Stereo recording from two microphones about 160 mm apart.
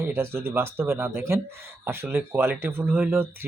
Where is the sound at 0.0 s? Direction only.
15° right (ahead or behind).